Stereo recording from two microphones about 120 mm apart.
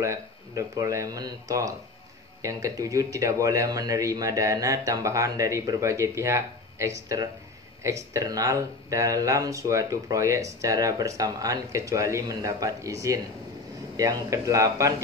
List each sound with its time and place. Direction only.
0.0 s speech: 25° right (ahead or behind)